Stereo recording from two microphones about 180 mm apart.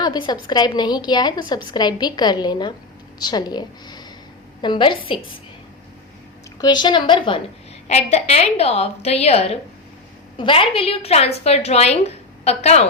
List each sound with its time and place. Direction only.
0.0 s a woman's voice: 20° left (ahead or behind)
6.6 s a woman's voice: 25° left (ahead or behind)
7.9 s a woman's voice: 35° left (ahead or behind)